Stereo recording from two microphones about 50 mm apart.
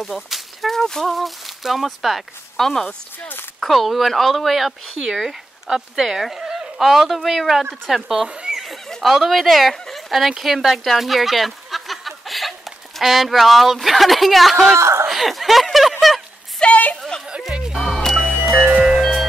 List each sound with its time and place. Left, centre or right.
0.0 s speech: centre
2.5 s speech: centre
8.4 s neigh: centre
8.6 s a sound: centre
13.0 s speech: centre
14.8 s snicker: right
15.0 s a sound: centre
16.5 s a sound: left
17.7 s music: centre
18.5 s music: right